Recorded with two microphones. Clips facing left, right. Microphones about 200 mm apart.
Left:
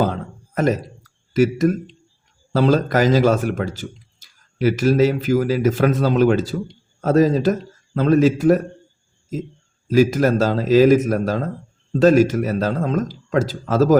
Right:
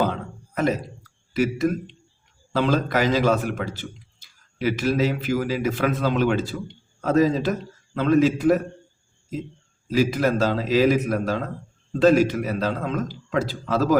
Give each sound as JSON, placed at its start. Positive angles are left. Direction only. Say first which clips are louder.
{"t": 0.0, "sound": "a sound", "louder": "left 3 dB", "side_deg": 45}
{"t": 1.3, "sound": "a man's voice", "louder": "left 5 dB", "side_deg": 45}
{"t": 9.9, "sound": "a man's voice", "louder": "left 5 dB", "side_deg": 45}